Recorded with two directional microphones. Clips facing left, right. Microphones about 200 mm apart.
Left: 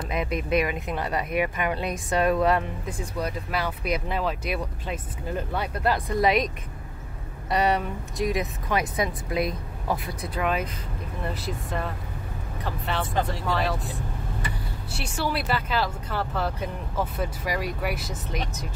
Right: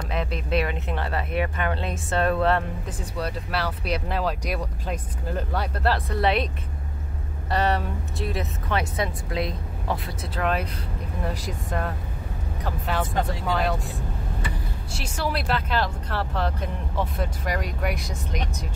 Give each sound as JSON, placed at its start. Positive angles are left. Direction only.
{"t": 0.1, "sound": "speech", "side_deg": 10}
{"t": 7.4, "sound": "speech", "side_deg": 10}
{"t": 9.0, "sound": "a woman's voice", "side_deg": -25}
{"t": 10.4, "sound": "speech", "side_deg": 5}
{"t": 14.9, "sound": "speech", "side_deg": 5}